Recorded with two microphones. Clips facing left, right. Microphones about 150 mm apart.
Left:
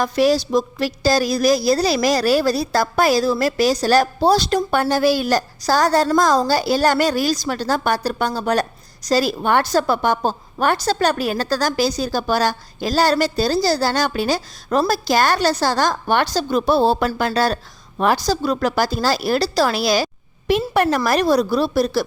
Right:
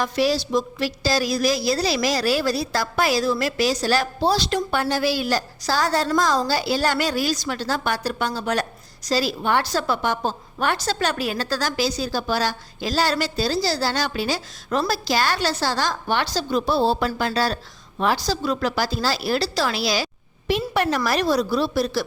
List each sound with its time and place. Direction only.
0.0 s a woman's voice: 45° left (ahead or behind)